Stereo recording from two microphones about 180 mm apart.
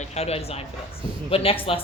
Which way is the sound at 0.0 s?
35° left (ahead or behind).